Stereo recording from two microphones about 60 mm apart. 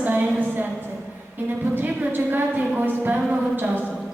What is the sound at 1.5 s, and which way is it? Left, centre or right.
A woman's voice, right.